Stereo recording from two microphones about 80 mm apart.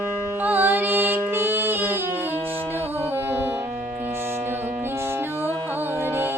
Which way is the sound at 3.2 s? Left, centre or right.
Right.